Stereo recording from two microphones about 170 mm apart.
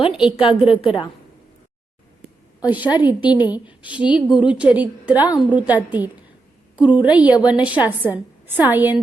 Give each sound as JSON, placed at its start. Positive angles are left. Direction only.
{"t": 0.3, "sound": "a woman's voice", "side_deg": 30}
{"t": 2.6, "sound": "a woman's voice", "side_deg": -10}
{"t": 3.2, "sound": "a woman's voice", "side_deg": 25}
{"t": 3.5, "sound": "a woman's voice", "side_deg": -10}